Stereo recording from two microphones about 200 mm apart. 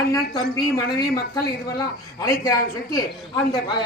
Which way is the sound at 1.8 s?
15° left (ahead or behind).